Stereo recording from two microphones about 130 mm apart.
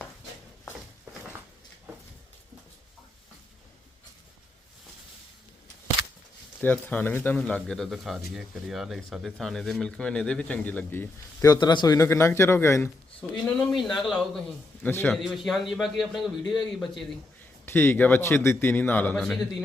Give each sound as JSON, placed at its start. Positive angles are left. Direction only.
{"t": 6.6, "sound": "speech", "side_deg": 15}
{"t": 11.4, "sound": "speech", "side_deg": 35}
{"t": 13.3, "sound": "a man's voice", "side_deg": 5}
{"t": 14.8, "sound": "speech", "side_deg": 15}
{"t": 15.1, "sound": "a man's voice", "side_deg": 0}
{"t": 17.7, "sound": "speech", "side_deg": 15}
{"t": 19.2, "sound": "a man's voice", "side_deg": 0}